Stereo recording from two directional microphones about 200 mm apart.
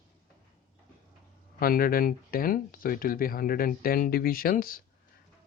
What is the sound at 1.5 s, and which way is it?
Speech, 45° left (ahead or behind).